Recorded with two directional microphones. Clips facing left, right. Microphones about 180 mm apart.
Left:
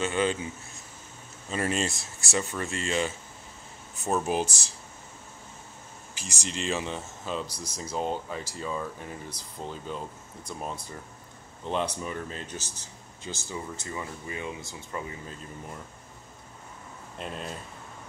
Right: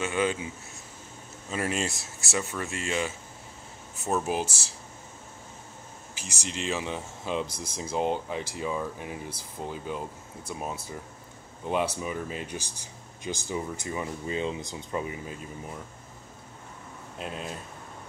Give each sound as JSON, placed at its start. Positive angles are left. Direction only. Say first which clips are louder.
{"t": 0.0, "sound": "speech", "louder": "left 1 dB", "side_deg": -5}
{"t": 1.5, "sound": "speech", "louder": "left 1 dB", "side_deg": -10}
{"t": 6.1, "sound": "speech", "louder": "left 1 dB", "side_deg": -10}
{"t": 7.4, "sound": "speech", "louder": "right 1 dB", "side_deg": -50}
{"t": 7.7, "sound": "speech", "louder": "right 3 dB", "side_deg": -10}
{"t": 17.2, "sound": "speech", "louder": "right 1 dB", "side_deg": -5}